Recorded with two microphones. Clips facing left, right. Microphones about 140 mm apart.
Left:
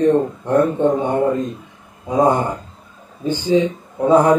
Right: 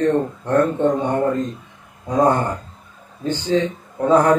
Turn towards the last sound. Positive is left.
turn(degrees=10)  # may be behind; listen again after turning